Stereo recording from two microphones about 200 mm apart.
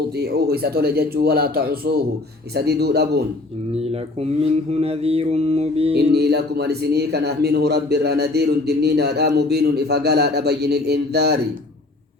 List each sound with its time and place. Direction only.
0.2 s a man's voice: 50° right (ahead or behind)
4.7 s mantra: 30° right (ahead or behind)
6.1 s speech: 55° right (ahead or behind)